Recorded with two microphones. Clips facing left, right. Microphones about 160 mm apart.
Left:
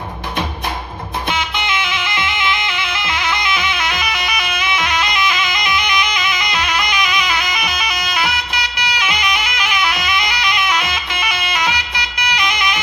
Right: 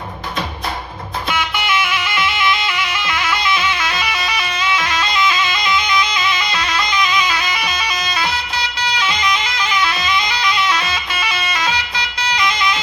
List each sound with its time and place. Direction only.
1.3 s music: 20° left (ahead or behind)
2.6 s bagpipes: 20° left (ahead or behind)